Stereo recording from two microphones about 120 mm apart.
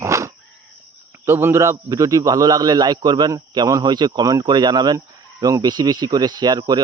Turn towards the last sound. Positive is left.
turn(degrees=-35)  # may be behind; listen again after turning